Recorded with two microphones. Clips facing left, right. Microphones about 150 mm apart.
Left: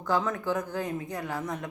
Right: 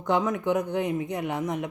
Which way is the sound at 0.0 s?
20° right (ahead or behind).